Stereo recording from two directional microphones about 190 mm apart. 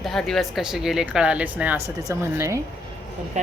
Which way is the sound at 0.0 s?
Centre (ahead or behind).